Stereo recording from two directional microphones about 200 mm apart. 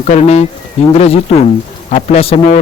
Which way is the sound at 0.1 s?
30° left (ahead or behind).